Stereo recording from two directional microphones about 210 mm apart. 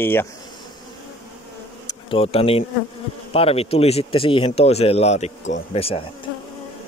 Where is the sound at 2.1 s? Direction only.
25° left (ahead or behind).